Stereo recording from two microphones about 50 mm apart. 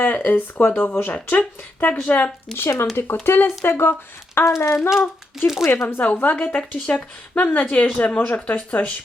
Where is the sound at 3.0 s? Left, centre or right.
Left.